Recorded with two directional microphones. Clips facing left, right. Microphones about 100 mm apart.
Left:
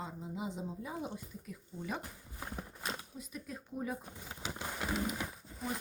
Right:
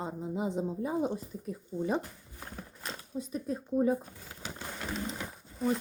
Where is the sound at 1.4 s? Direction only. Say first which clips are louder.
Right 12 dB; 35° right (ahead or behind).